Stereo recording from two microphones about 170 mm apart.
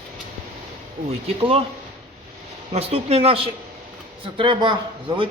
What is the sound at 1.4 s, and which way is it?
Speech, 35° right (ahead or behind).